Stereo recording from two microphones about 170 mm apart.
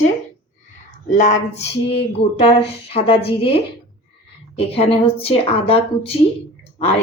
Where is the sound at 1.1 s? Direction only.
45° left (ahead or behind).